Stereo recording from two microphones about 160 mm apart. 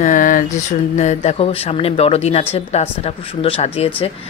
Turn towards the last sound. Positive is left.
turn(degrees=35)  # may be behind; listen again after turning